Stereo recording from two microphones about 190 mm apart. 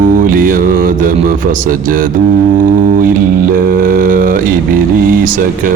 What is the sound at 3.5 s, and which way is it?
Mantra, 50° right (ahead or behind).